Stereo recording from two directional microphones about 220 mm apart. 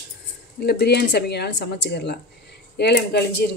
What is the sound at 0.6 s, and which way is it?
Speech, 45° left (ahead or behind).